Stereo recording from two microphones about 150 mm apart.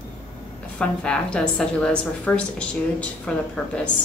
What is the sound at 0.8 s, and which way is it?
A woman's voice, 5° left (ahead or behind).